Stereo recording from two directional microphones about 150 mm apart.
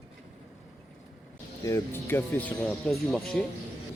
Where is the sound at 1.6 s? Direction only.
20° left (ahead or behind); by 3.5 s 5° left (ahead or behind).